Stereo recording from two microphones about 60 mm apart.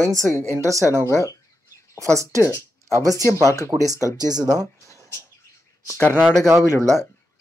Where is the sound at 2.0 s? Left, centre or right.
Right.